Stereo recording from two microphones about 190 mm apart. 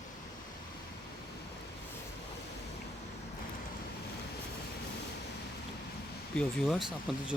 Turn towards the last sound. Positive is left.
turn(degrees=0)  # may be behind; listen again after turning